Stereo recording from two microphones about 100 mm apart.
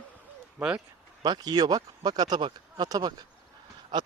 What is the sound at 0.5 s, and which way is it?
Speech, 10° right (ahead or behind).